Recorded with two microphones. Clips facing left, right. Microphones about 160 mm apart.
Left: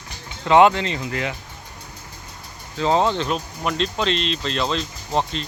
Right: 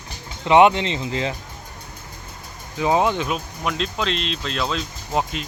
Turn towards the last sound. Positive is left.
turn(degrees=-5)  # may be behind; listen again after turning